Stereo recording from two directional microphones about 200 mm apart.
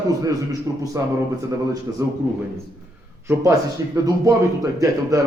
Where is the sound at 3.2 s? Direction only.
15° right (ahead or behind).